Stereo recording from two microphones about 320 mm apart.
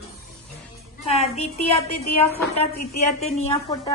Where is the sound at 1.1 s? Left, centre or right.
Centre.